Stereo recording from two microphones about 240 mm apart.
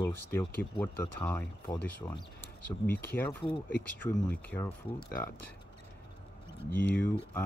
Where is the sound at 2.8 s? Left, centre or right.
Centre.